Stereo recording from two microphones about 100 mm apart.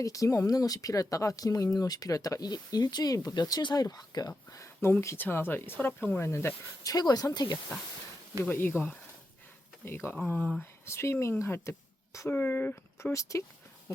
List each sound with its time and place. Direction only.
0.0 s speech: 35° left (ahead or behind)
4.3 s speech: 30° left (ahead or behind)
6.8 s speech: 40° left (ahead or behind)
8.4 s speech: 20° left (ahead or behind)
10.8 s speech: 25° left (ahead or behind)
13.1 s speech: 30° left (ahead or behind)